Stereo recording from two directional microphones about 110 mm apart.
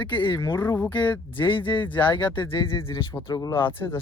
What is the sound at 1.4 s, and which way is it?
Speech, 50° left (ahead or behind).